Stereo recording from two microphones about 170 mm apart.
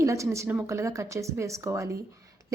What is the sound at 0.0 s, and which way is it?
A woman's voice, 20° right (ahead or behind).